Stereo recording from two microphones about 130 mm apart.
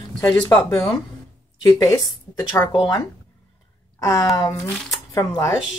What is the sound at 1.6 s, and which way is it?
Speech, 30° left (ahead or behind).